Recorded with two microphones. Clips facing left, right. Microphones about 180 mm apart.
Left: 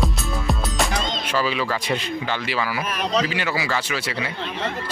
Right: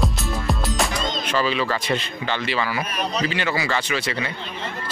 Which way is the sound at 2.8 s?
90° left.